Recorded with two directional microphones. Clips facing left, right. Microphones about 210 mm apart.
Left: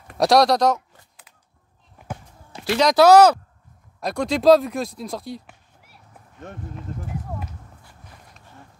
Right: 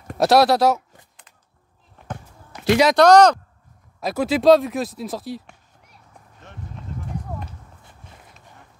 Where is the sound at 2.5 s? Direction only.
25° left (ahead or behind).